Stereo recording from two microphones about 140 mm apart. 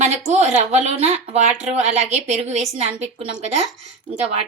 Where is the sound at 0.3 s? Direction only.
50° right (ahead or behind).